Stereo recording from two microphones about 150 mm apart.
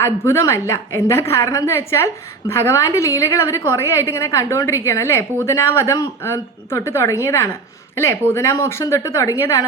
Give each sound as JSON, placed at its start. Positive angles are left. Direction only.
{"t": 0.0, "sound": "a woman's voice", "side_deg": 15}